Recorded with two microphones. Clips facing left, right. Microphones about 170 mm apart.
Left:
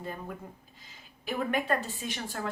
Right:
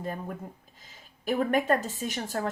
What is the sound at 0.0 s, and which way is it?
Speech, 50° right (ahead or behind).